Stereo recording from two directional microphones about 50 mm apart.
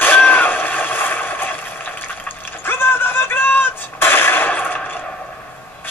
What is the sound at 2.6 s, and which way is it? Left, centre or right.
Artillery fire, left.